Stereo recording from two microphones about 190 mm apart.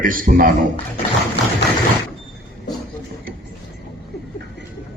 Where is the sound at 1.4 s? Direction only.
65° left (ahead or behind).